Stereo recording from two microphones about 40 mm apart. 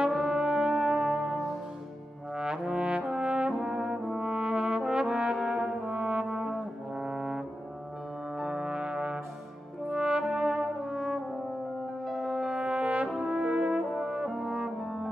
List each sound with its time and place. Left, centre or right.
0.1 s brass instrument: centre
1.1 s music: right
2.3 s brass instrument: centre
3.5 s brass instrument: centre
5.9 s brass instrument: right; by 7.4 s centre
8.5 s brass instrument: centre
9.8 s french horn: right
12.1 s music: centre
12.5 s brass instrument: right
13.2 s brass instrument: right
13.7 s brass instrument: centre
13.9 s french horn: right
14.4 s brass instrument: right
14.8 s brass instrument: centre